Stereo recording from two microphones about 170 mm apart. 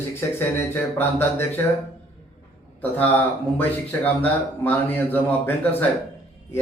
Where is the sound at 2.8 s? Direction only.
10° left (ahead or behind).